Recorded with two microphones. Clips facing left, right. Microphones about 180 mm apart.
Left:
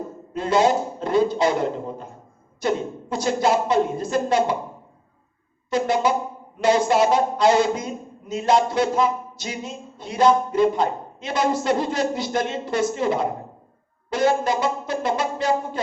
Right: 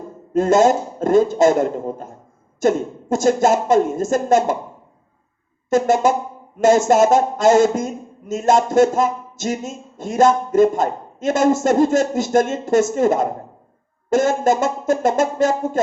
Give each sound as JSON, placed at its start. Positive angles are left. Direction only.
{"t": 0.3, "sound": "speech", "side_deg": -45}
{"t": 5.7, "sound": "speech", "side_deg": -45}